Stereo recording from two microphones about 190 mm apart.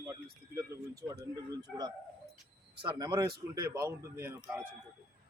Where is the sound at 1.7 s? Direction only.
5° left (ahead or behind).